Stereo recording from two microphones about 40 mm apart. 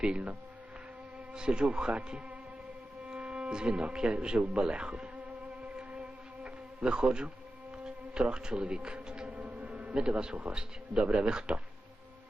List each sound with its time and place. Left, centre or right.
0.0 s speech: right
1.3 s speech: right
5.7 s music: right
7.9 s insect: right
9.2 s music: right
9.9 s speech: right